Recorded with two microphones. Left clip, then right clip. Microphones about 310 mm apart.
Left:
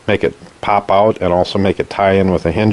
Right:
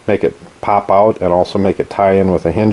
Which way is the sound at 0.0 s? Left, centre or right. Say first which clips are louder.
Right 1 dB; centre.